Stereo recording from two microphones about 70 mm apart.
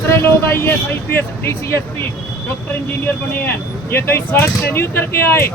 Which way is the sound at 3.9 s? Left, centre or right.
Left.